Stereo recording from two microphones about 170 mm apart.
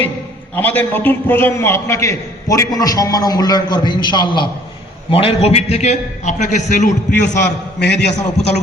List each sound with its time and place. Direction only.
0.5 s a man's voice: 10° left (ahead or behind); by 6.9 s 45° left (ahead or behind)
7.8 s a man's voice: 85° left
8.1 s a man's voice: 40° left (ahead or behind)